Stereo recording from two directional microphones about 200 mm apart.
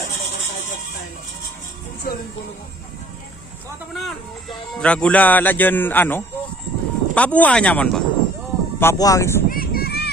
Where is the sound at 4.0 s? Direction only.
Centre (ahead or behind).